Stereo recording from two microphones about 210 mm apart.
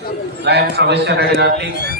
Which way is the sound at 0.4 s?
50° right (ahead or behind).